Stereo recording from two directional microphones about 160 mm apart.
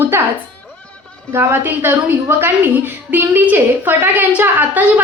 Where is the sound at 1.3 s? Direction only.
15° right (ahead or behind).